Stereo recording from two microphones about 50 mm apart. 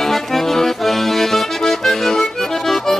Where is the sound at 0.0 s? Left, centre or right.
Centre.